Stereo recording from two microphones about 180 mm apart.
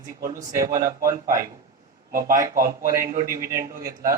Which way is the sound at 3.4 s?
15° right (ahead or behind).